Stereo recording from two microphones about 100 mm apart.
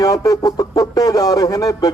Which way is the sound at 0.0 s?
35° left (ahead or behind).